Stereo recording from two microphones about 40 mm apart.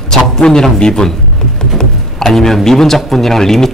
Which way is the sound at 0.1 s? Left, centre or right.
Centre.